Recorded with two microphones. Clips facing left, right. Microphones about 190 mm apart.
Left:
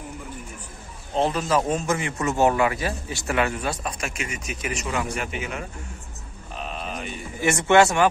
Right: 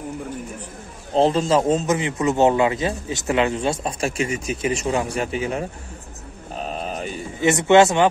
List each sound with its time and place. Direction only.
1.1 s speech: 30° right (ahead or behind)
6.5 s a sound: 40° right (ahead or behind)
7.3 s speech: 20° right (ahead or behind)